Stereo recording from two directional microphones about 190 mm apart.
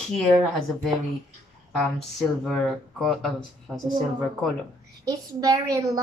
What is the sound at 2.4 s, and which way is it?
Speech, centre (ahead or behind).